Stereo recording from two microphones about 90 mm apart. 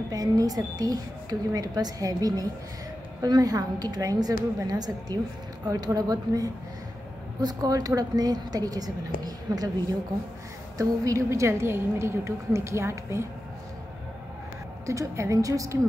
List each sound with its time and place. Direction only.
0.1 s a woman's voice: 40° right (ahead or behind)
10.8 s a woman's voice: 35° right (ahead or behind)
14.9 s a woman's voice: 35° right (ahead or behind)